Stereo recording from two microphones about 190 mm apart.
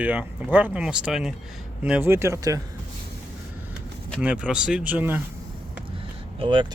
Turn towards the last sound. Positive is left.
turn(degrees=-25)  # may be behind; listen again after turning